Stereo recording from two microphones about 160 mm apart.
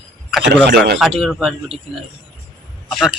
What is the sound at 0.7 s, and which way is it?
Speech, 90° right.